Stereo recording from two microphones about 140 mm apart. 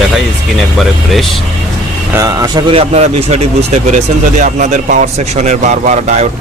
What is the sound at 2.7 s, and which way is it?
Speech, 50° right (ahead or behind).